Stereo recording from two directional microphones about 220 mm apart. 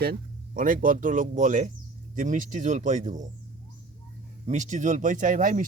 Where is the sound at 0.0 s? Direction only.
40° right (ahead or behind).